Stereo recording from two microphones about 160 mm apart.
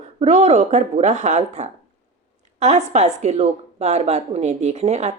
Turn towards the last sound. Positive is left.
turn(degrees=-45)  # may be behind; listen again after turning